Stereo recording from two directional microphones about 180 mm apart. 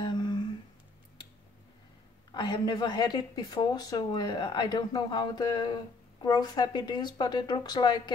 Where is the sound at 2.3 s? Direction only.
25° left (ahead or behind).